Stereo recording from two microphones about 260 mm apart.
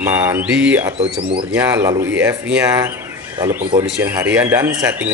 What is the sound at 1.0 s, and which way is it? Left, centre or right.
Speech, right.